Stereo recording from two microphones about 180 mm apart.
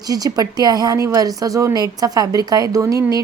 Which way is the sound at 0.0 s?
20° right (ahead or behind).